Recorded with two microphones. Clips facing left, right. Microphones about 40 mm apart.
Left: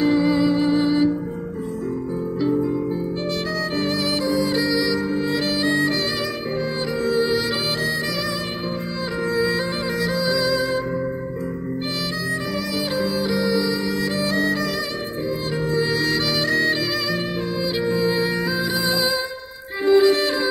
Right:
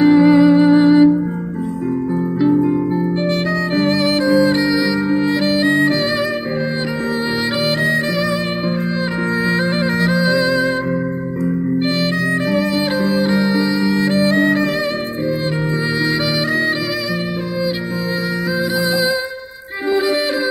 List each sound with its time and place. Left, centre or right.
0.0 s music: right
2.4 s music: right
9.4 s music: right
12.5 s music: right
16.1 s music: centre
19.9 s music: centre